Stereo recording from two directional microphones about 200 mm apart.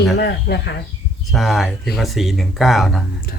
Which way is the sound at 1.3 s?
Centre (ahead or behind).